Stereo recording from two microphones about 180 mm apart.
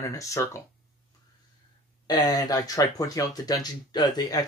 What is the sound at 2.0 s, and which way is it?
Speech, 20° left (ahead or behind).